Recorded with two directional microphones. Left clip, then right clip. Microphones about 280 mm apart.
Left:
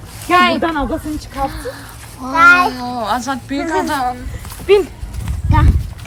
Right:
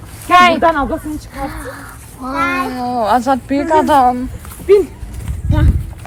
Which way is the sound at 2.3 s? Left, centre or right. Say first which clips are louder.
Left 8 dB; left.